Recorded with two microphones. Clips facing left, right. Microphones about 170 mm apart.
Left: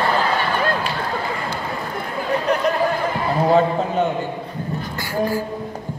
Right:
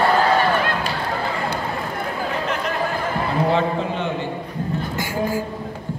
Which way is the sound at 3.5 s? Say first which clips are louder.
Left 4 dB; 40° left (ahead or behind).